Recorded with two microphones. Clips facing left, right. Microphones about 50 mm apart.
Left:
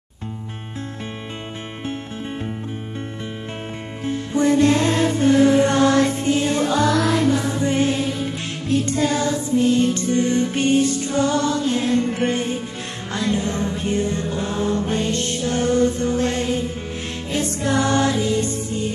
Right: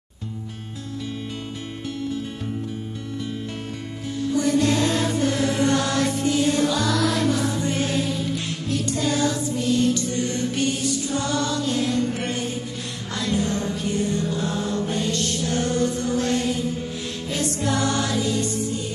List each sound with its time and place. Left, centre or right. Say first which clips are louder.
4.0 s music: left 3 dB; left